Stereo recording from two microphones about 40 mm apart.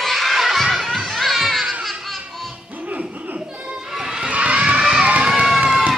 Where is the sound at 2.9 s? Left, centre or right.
Right.